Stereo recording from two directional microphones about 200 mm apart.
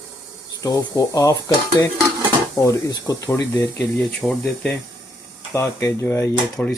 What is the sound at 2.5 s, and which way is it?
Speech, 15° left (ahead or behind).